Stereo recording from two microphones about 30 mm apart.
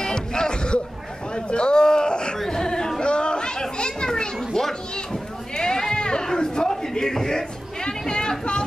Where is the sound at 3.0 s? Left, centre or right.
Left.